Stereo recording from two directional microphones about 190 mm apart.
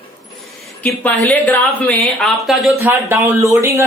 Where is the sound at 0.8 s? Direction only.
10° left (ahead or behind).